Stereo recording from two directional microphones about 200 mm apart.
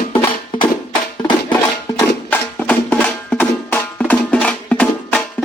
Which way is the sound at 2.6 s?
5° left (ahead or behind).